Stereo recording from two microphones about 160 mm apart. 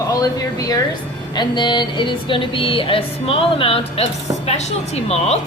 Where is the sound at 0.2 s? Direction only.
20° left (ahead or behind).